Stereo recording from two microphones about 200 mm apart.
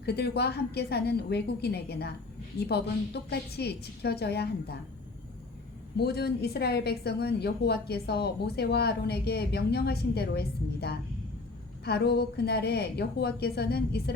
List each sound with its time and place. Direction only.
0.0 s a woman's voice: 55° left (ahead or behind)
6.0 s a woman's voice: 55° left (ahead or behind)